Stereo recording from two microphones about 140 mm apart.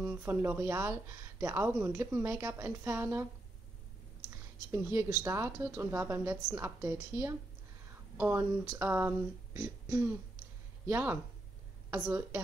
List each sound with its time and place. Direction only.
0.0 s speech: 15° right (ahead or behind)
4.3 s speech: 20° right (ahead or behind)
8.2 s speech: 10° right (ahead or behind)